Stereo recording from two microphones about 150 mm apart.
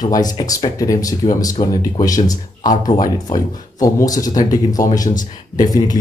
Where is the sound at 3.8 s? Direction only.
25° left (ahead or behind).